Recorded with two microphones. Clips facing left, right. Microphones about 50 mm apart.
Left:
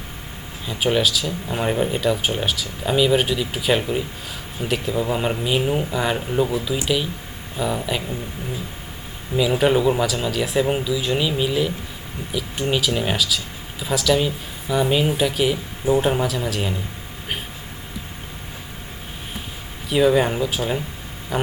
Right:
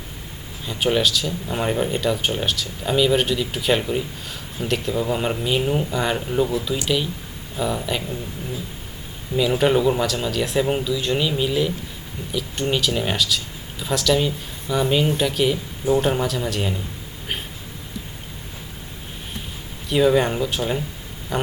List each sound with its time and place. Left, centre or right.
0.6 s speech: centre
9.3 s speech: centre
19.9 s speech: centre